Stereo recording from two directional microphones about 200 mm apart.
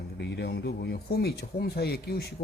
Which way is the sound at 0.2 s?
60° left (ahead or behind).